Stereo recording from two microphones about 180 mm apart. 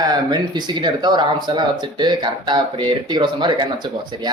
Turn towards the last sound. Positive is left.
turn(degrees=-25)  # may be behind; listen again after turning